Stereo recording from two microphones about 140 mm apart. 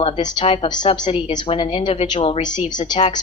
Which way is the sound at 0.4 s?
45° left (ahead or behind).